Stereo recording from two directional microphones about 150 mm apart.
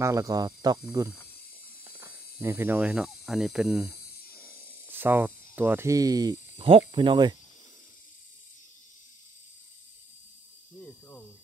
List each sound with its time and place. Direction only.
0.0 s speech: 20° right (ahead or behind)
1.9 s a sound: 15° right (ahead or behind)
2.4 s speech: 15° right (ahead or behind)
4.4 s snake: 15° right (ahead or behind); by 6.8 s 30° right (ahead or behind)
6.9 s speech: 35° right (ahead or behind)
10.8 s snake: 5° left (ahead or behind)